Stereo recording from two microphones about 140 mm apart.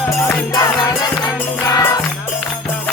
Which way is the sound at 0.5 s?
25° left (ahead or behind).